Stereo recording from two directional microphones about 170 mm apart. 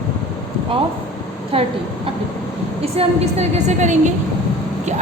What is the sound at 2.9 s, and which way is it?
A woman's voice, 40° right (ahead or behind).